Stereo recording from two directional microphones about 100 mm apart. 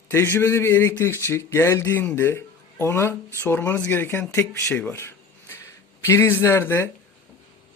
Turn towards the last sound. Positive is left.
turn(degrees=25)  # may be behind; listen again after turning